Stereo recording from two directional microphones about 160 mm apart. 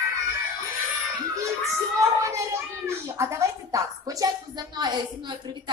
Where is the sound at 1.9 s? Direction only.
20° right (ahead or behind).